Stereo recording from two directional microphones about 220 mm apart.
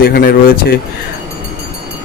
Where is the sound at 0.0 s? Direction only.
45° left (ahead or behind).